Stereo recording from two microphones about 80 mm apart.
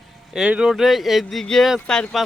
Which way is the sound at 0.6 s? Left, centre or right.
Centre.